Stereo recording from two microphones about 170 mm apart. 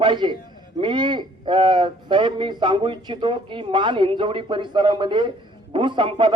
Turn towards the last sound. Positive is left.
turn(degrees=-30)  # may be behind; listen again after turning